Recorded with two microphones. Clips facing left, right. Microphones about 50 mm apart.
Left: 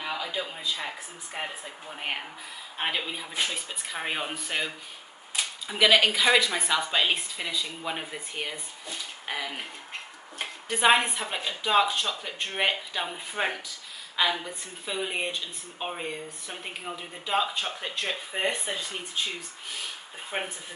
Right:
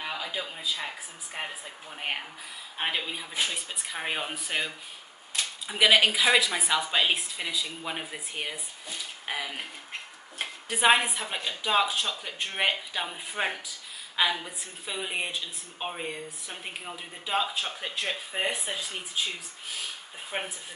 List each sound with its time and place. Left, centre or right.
0.0 s speech: centre